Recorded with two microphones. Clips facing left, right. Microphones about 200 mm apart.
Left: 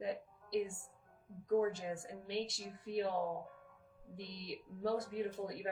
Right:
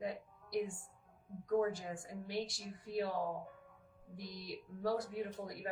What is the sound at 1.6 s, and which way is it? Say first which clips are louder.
A woman's voice: even; 20° left (ahead or behind).